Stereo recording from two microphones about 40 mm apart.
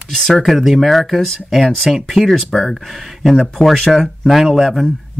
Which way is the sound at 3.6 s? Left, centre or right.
Centre.